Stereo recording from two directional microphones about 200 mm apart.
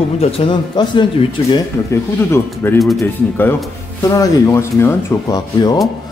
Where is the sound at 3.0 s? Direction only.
10° left (ahead or behind).